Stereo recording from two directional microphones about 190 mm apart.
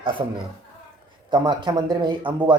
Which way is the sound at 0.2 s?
25° right (ahead or behind).